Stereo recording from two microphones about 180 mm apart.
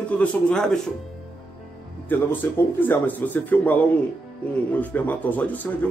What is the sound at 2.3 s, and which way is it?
A man's voice, 10° left (ahead or behind).